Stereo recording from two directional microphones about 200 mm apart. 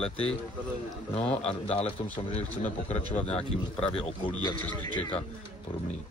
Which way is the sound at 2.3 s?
35° left (ahead or behind).